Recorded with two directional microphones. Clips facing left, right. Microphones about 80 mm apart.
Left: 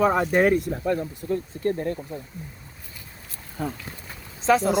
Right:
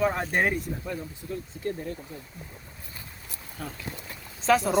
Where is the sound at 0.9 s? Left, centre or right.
Left.